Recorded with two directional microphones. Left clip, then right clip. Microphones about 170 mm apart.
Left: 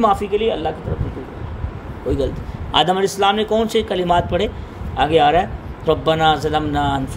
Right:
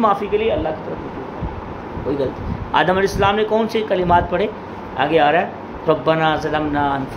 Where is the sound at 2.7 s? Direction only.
45° left (ahead or behind).